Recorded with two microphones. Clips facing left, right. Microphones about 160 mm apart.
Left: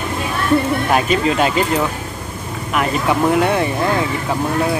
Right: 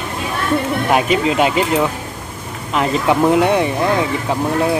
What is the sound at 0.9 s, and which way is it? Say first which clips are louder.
Speech: right 2 dB; 20° right (ahead or behind).